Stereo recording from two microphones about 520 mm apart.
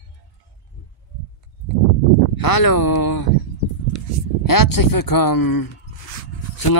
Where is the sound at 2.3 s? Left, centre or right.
Left.